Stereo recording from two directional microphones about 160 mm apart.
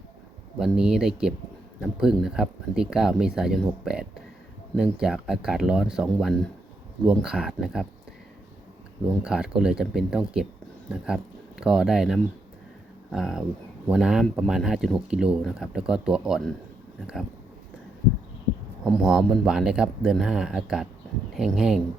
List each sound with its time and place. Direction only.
0.6 s speech: 5° right (ahead or behind)
9.0 s speech: 5° right (ahead or behind)
18.9 s speech: 5° right (ahead or behind)